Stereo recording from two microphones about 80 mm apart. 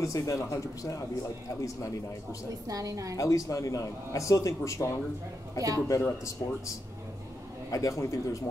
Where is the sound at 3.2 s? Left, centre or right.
Left.